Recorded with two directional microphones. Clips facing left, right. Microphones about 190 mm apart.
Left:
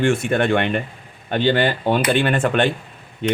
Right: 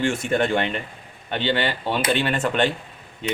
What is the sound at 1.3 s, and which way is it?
Speech, 45° left (ahead or behind).